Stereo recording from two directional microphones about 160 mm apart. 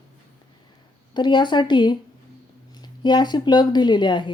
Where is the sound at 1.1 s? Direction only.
30° left (ahead or behind).